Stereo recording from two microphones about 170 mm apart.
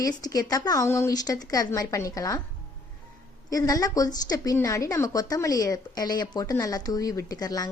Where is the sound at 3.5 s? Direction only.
20° left (ahead or behind).